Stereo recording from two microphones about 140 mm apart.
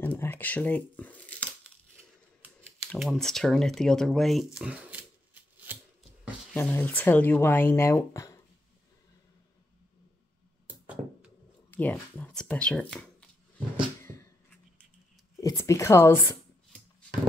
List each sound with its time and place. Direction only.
0.0 s shuffling cards: 15° left (ahead or behind)
2.9 s speech: centre (ahead or behind)
6.5 s speech: 15° left (ahead or behind)
10.7 s a sound: 10° right (ahead or behind)
11.7 s speech: 15° left (ahead or behind)
14.0 s a sound: 20° left (ahead or behind)
15.4 s speech: 20° left (ahead or behind)